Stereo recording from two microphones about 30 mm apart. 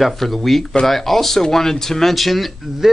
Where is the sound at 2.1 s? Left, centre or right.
Centre.